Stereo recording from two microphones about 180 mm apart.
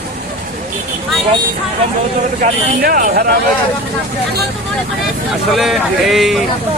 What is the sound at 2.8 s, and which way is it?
Speech, 50° right (ahead or behind).